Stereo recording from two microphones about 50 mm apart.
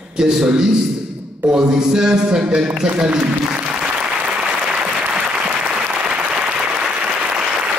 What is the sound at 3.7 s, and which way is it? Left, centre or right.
Applause, right.